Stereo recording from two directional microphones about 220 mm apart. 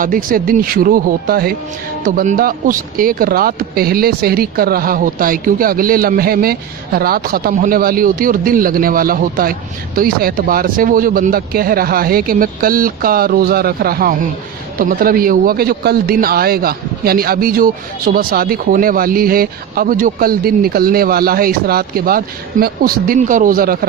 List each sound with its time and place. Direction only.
0.0 s speech: 40° right (ahead or behind)